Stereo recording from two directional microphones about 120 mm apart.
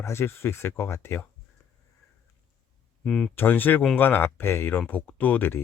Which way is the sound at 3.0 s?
5° left (ahead or behind).